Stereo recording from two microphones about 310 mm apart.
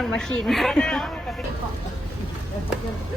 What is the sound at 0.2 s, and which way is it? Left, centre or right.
Speech, centre.